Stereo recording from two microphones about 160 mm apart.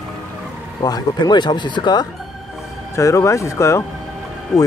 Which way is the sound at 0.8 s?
25° left (ahead or behind).